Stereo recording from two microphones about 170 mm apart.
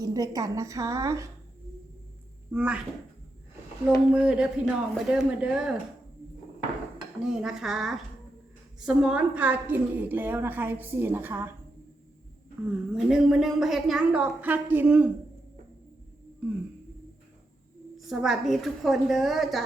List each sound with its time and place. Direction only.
0.0 s a woman's voice: 20° right (ahead or behind)
2.5 s a woman's voice: 5° right (ahead or behind)
4.1 s a woman's voice: 5° right (ahead or behind)
7.2 s a woman's voice: 5° right (ahead or behind)
12.7 s a woman's voice: 5° right (ahead or behind)
17.9 s a woman's voice: centre (ahead or behind)